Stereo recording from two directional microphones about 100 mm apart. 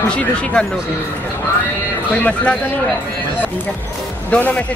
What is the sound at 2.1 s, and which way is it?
Speech, 10° left (ahead or behind).